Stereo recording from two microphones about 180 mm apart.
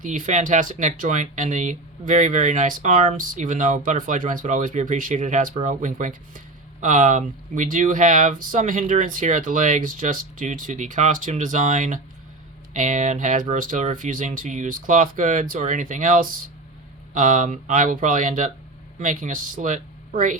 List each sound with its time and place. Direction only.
0.0 s speech: 45° right (ahead or behind)